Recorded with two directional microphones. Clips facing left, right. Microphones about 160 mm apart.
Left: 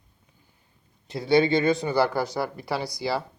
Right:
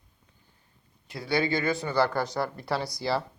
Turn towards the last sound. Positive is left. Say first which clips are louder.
# left 1 dB
turn(degrees=0)  # may be behind; listen again after turning